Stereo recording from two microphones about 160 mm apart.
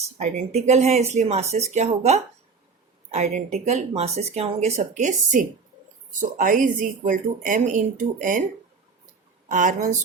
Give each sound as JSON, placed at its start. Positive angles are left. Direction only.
{"t": 0.2, "sound": "speech", "side_deg": -45}
{"t": 9.5, "sound": "speech", "side_deg": -55}